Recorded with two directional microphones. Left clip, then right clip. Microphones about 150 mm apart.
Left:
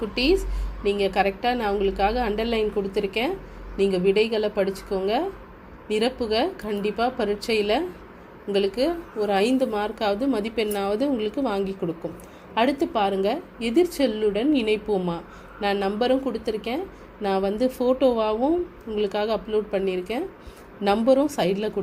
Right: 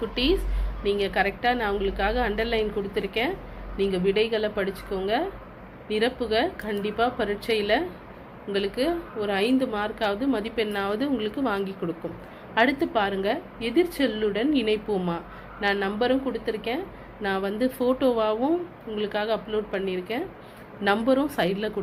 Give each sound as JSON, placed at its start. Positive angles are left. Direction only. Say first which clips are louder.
{"t": 0.1, "sound": "a woman's voice", "louder": "left 6 dB", "side_deg": 55}
{"t": 15.6, "sound": "a woman's voice", "louder": "left 1 dB", "side_deg": 55}
{"t": 18.9, "sound": "a woman's voice", "louder": "left 2 dB", "side_deg": 60}
{"t": 20.8, "sound": "a woman's voice", "louder": "left 3 dB", "side_deg": 45}